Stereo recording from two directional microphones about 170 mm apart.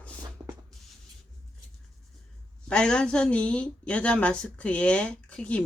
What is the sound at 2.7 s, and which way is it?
Speech, 5° left (ahead or behind).